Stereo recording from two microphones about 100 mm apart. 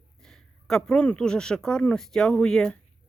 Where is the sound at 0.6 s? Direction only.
5° left (ahead or behind).